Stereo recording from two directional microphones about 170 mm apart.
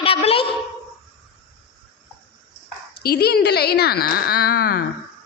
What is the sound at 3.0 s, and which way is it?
Speech, 70° left (ahead or behind).